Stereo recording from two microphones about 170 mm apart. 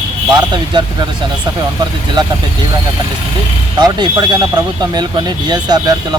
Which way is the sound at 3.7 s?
25° right (ahead or behind).